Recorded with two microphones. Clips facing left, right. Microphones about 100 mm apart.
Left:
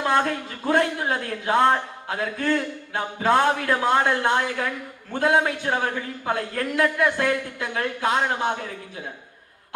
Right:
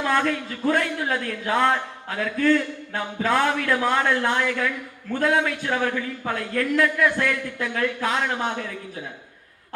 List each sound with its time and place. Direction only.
0.0 s speech: 35° left (ahead or behind)